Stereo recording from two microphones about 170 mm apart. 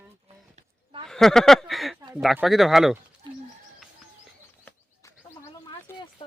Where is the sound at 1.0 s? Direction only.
Centre (ahead or behind).